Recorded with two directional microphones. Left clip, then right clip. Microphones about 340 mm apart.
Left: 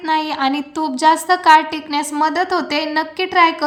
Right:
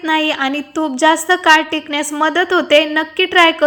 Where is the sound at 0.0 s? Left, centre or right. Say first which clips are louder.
Right 2 dB; centre.